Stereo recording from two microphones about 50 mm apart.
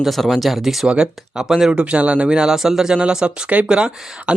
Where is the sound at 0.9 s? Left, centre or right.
Centre.